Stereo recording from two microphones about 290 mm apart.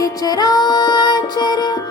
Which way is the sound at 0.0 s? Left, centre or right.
Centre.